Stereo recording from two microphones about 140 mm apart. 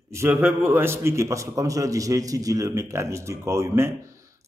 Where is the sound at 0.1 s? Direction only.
15° right (ahead or behind).